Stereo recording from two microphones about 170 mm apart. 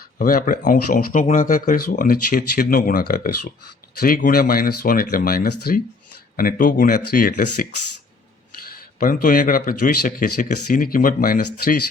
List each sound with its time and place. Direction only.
0.2 s a man's voice: 55° left (ahead or behind)
9.0 s a man's voice: 55° left (ahead or behind)